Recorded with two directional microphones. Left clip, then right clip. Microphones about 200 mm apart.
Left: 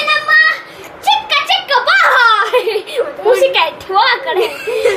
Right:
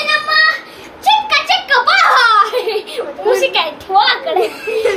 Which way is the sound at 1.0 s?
10° right (ahead or behind).